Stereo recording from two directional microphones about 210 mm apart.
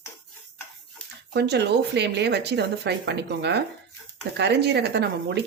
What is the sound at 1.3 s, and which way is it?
Speech, 50° right (ahead or behind).